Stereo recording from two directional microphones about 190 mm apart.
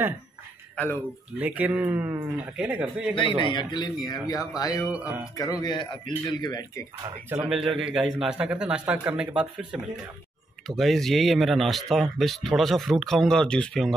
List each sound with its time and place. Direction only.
1.4 s speech: 10° right (ahead or behind)
3.3 s speech: 25° left (ahead or behind)
4.8 s speech: 5° right (ahead or behind)
5.3 s speech: 20° left (ahead or behind)
7.2 s speech: 5° right (ahead or behind)